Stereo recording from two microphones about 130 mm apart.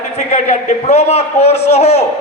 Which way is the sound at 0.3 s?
60° left (ahead or behind).